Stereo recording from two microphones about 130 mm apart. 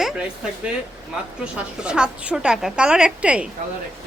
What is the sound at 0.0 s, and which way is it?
A woman's voice, 10° right (ahead or behind).